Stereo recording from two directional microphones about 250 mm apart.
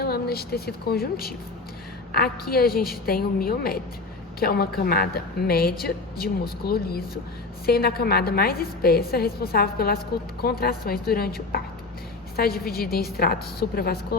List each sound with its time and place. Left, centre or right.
0.0 s a woman's voice: left
12.4 s a woman's voice: left